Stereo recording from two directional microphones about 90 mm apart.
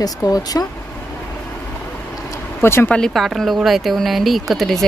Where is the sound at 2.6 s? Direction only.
25° left (ahead or behind).